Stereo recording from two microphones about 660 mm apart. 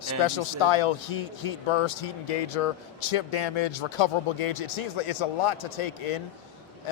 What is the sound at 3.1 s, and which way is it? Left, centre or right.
A man's voice, left.